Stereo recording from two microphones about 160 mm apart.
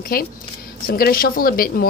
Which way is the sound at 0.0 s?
65° left (ahead or behind).